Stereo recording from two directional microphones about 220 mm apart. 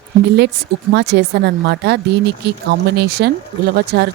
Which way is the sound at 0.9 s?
50° right (ahead or behind).